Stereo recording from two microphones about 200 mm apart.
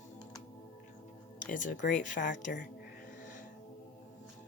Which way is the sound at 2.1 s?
40° left (ahead or behind).